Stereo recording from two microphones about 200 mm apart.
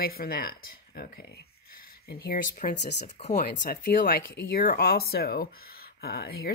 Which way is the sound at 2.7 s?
55° left (ahead or behind).